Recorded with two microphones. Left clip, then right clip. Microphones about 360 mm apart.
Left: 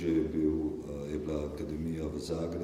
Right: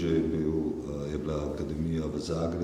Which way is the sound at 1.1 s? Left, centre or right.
Right.